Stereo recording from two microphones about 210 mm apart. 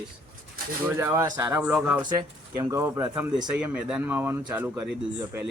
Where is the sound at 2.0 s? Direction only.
20° right (ahead or behind).